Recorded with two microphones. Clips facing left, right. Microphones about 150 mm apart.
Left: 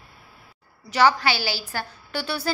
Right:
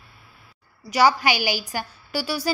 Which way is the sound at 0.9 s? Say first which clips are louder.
Right 1 dB; 15° right (ahead or behind).